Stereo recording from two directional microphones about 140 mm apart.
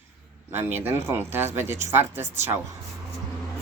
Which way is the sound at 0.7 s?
15° right (ahead or behind).